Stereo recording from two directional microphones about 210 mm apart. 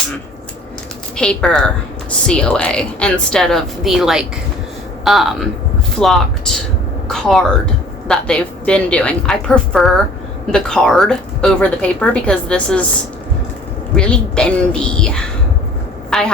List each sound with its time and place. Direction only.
1.1 s speech: 5° left (ahead or behind)
13.9 s speech: 5° left (ahead or behind)
16.0 s a sound: 5° left (ahead or behind)